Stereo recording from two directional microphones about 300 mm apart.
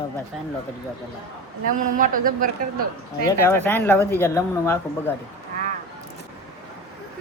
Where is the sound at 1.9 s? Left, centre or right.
Right.